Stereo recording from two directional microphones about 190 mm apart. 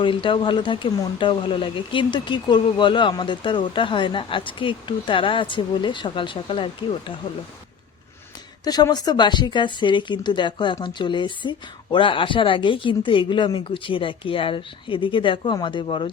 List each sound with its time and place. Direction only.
0.0 s speech: 25° left (ahead or behind)
8.6 s speech: 20° left (ahead or behind)